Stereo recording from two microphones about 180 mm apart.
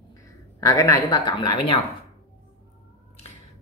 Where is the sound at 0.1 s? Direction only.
20° left (ahead or behind).